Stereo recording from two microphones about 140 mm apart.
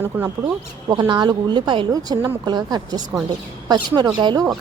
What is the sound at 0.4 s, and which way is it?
A woman's voice, 30° right (ahead or behind).